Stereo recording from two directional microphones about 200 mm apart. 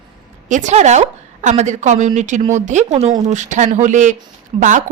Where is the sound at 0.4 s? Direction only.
35° right (ahead or behind).